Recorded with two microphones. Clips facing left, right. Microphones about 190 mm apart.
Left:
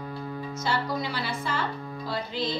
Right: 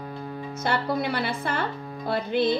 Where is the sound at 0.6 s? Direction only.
60° right (ahead or behind).